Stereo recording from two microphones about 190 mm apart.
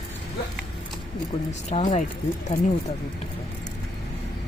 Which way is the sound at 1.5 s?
35° left (ahead or behind).